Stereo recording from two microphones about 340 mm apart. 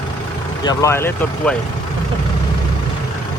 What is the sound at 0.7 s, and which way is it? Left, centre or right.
Speech, centre.